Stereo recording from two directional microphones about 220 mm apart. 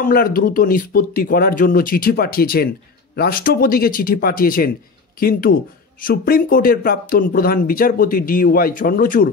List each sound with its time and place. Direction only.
0.0 s speech: 40° left (ahead or behind)